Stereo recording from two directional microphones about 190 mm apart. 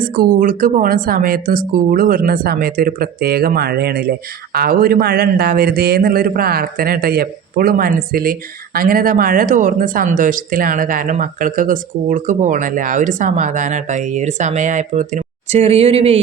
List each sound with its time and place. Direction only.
0.0 s speech: 50° right (ahead or behind); by 16.2 s 30° right (ahead or behind)